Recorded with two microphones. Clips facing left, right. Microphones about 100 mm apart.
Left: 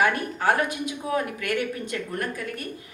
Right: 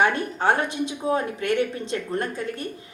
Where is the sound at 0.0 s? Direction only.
30° right (ahead or behind).